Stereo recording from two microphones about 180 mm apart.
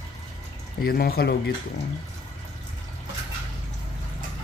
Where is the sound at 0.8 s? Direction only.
60° left (ahead or behind).